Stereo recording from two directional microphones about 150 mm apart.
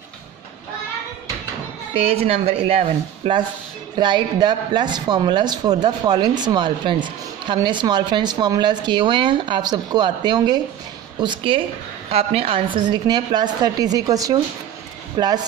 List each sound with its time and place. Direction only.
2.1 s speech: 45° right (ahead or behind)